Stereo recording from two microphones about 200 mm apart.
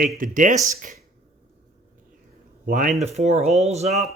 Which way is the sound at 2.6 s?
40° right (ahead or behind).